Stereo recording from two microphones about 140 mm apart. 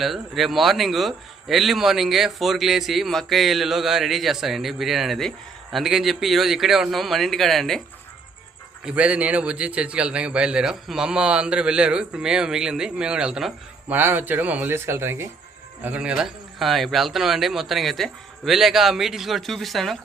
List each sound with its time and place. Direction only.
0.0 s a man's voice: centre (ahead or behind)
8.8 s a man's voice: 10° right (ahead or behind)